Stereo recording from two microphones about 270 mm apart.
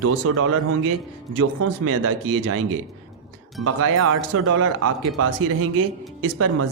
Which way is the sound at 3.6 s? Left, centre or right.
Right.